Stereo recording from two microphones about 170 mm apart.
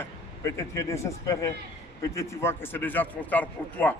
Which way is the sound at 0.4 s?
15° left (ahead or behind).